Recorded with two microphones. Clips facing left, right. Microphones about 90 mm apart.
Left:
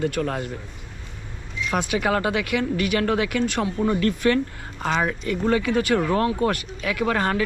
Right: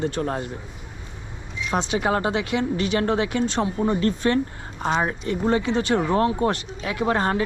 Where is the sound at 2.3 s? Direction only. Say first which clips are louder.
Even; 60° left (ahead or behind).